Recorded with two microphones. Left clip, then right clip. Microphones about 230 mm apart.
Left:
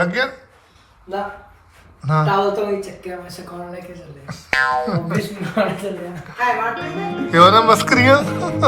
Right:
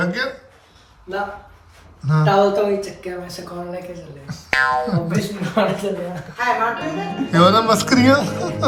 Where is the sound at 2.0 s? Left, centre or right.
Centre.